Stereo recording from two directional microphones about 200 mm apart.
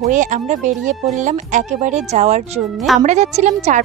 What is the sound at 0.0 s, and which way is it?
A woman's voice, 40° right (ahead or behind).